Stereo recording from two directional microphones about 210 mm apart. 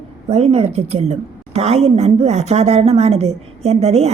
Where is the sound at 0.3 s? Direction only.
30° right (ahead or behind).